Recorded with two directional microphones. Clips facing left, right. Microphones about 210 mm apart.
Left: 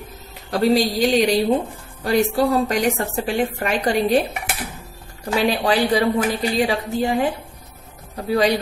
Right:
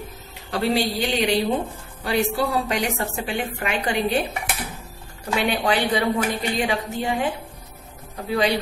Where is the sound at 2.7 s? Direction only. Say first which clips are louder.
Left 4 dB; 40° left (ahead or behind).